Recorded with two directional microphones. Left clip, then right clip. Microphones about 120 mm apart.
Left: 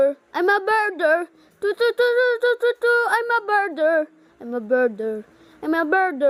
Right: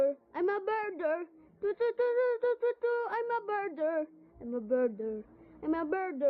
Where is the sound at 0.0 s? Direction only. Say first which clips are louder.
Left 11 dB; 25° left (ahead or behind).